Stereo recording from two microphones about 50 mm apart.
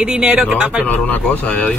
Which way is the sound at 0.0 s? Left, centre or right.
Centre.